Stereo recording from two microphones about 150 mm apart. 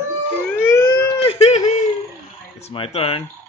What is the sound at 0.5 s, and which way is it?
Siren, 15° left (ahead or behind).